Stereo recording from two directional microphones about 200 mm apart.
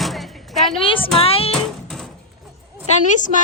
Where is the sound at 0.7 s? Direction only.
25° left (ahead or behind).